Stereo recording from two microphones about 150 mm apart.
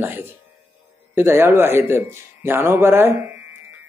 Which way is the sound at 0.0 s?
15° right (ahead or behind).